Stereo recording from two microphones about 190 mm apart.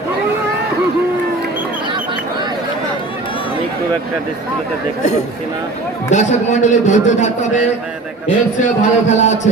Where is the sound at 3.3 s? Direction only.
25° left (ahead or behind).